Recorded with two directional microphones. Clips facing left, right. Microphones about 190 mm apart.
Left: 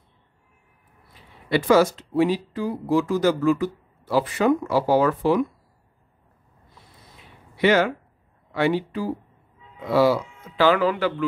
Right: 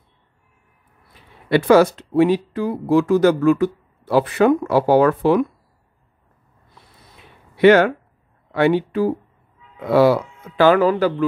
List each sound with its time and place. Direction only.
1.5 s speech: 60° right (ahead or behind)
7.5 s speech: 60° right (ahead or behind); by 11.2 s 40° right (ahead or behind)